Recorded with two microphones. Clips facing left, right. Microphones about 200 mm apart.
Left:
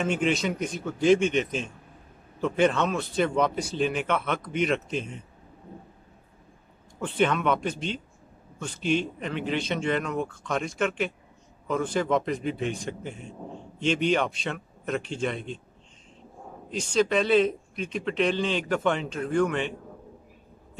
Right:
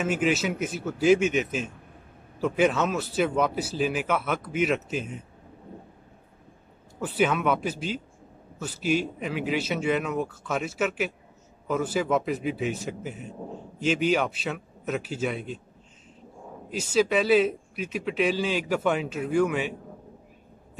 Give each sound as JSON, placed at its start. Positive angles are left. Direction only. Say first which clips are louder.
{"t": 0.0, "sound": "speech", "louder": "even", "side_deg": -5}
{"t": 7.0, "sound": "speech", "louder": "even", "side_deg": -5}
{"t": 16.7, "sound": "speech", "louder": "right 1 dB", "side_deg": -5}